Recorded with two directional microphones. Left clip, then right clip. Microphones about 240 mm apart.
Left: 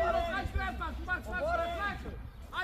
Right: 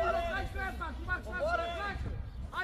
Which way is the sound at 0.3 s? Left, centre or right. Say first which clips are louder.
Left 1 dB; left.